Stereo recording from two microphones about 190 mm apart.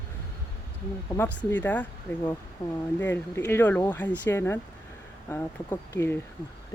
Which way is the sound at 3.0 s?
10° left (ahead or behind).